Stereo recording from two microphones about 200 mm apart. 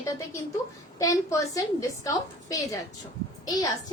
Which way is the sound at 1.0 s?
15° left (ahead or behind).